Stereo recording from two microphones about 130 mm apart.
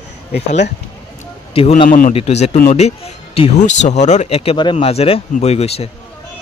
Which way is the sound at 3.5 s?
65° left (ahead or behind).